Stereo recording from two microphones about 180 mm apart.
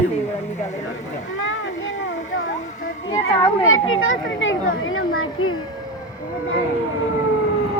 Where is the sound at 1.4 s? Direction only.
90° left.